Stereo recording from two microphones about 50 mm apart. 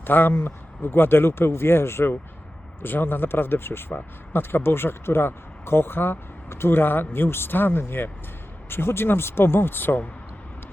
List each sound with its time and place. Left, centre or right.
0.0 s speech: left
2.8 s speech: left